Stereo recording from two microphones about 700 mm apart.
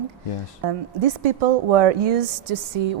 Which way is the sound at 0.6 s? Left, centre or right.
Right.